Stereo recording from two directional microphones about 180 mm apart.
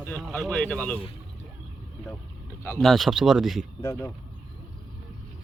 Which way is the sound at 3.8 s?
15° left (ahead or behind).